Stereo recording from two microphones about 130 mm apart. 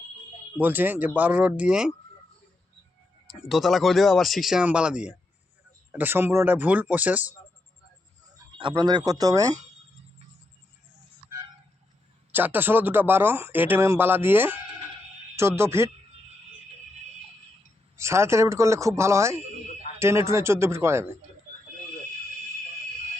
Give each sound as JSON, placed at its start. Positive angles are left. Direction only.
{"t": 0.5, "sound": "speech", "side_deg": -15}
{"t": 3.5, "sound": "speech", "side_deg": 0}
{"t": 8.5, "sound": "speech", "side_deg": -35}
{"t": 12.3, "sound": "speech", "side_deg": -15}
{"t": 17.9, "sound": "speech", "side_deg": -20}